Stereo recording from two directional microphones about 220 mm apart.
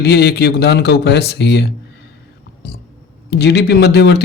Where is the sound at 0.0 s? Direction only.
50° left (ahead or behind).